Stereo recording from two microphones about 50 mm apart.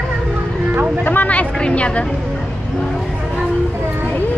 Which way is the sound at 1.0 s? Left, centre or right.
Left.